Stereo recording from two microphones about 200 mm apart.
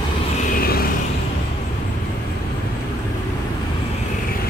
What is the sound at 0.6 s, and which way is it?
Vehicle, 50° left (ahead or behind).